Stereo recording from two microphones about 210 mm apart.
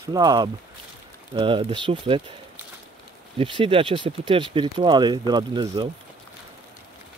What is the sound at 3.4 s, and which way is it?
Speech, 25° right (ahead or behind).